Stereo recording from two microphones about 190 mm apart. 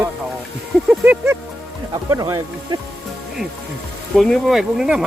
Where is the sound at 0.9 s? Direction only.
10° right (ahead or behind).